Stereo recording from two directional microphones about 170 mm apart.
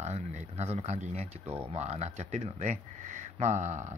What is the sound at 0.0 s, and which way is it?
Speech, 40° right (ahead or behind).